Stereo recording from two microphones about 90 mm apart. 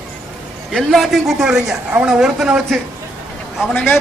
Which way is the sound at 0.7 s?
Centre (ahead or behind).